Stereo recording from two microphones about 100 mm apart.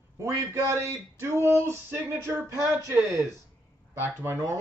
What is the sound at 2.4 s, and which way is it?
Speech, 30° right (ahead or behind).